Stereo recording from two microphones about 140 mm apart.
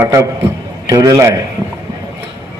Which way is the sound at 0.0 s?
20° right (ahead or behind).